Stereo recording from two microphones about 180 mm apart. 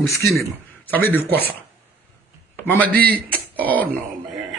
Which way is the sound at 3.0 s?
60° right (ahead or behind).